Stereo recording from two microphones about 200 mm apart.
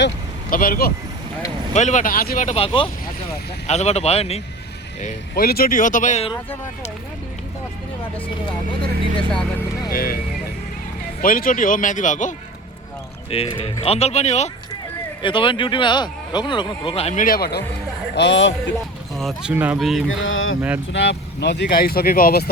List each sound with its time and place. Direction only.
0.5 s speech: 45° left (ahead or behind)
1.7 s speech: 35° left (ahead or behind)
5.0 s speech: 45° left (ahead or behind)
9.9 s speech: 50° left (ahead or behind)
11.2 s speech: 45° left (ahead or behind)
13.3 s speech: 30° left (ahead or behind)
17.2 s speech: 50° left (ahead or behind)
18.1 s a man's voice: 60° left (ahead or behind)
19.1 s speech: centre (ahead or behind)
20.1 s speech: 80° left
20.6 s speech: 10° right (ahead or behind)
20.9 s speech: 65° left (ahead or behind)